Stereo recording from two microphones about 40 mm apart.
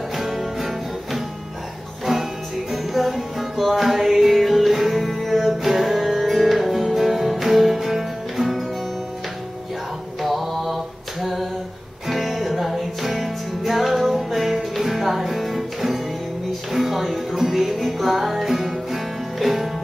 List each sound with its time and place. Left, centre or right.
0.2 s music: centre
2.7 s music: centre
10.2 s mantra: centre
12.1 s music: centre